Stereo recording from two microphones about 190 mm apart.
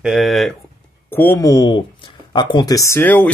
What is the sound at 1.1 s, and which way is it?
Speech, 10° left (ahead or behind).